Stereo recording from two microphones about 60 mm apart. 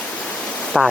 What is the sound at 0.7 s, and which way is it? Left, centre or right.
Speech, centre.